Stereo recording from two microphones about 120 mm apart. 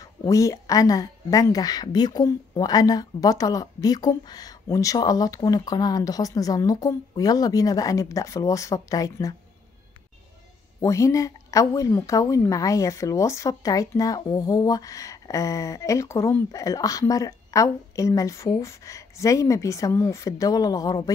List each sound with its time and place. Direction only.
0.0 s a woman's voice: 25° left (ahead or behind)
10.8 s a woman's voice: 25° left (ahead or behind)